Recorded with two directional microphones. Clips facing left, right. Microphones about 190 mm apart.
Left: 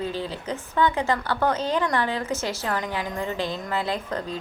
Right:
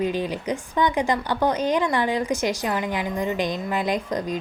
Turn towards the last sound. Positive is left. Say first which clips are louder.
# right 4 dB
turn(degrees=-15)  # may be behind; listen again after turning